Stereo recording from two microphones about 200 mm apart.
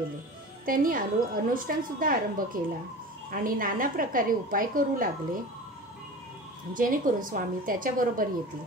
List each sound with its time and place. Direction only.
0.7 s a woman's voice: 45° right (ahead or behind)
6.7 s a woman's voice: 45° right (ahead or behind)